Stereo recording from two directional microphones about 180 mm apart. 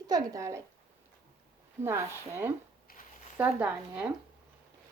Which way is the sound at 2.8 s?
50° left (ahead or behind).